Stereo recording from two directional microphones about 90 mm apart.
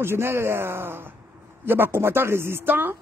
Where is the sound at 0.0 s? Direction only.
25° right (ahead or behind).